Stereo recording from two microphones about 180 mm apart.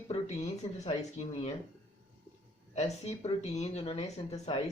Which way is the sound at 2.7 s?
35° left (ahead or behind).